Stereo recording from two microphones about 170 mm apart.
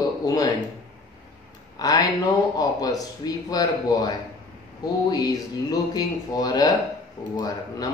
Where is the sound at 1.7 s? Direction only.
20° left (ahead or behind).